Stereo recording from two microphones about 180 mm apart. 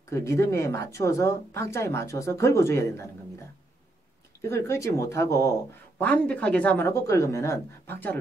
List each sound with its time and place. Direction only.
0.1 s speech: 15° left (ahead or behind)
4.4 s speech: 15° left (ahead or behind)